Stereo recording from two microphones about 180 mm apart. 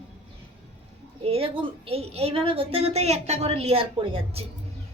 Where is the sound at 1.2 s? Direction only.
30° right (ahead or behind).